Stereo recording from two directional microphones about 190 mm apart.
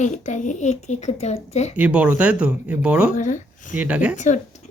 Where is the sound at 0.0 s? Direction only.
40° left (ahead or behind).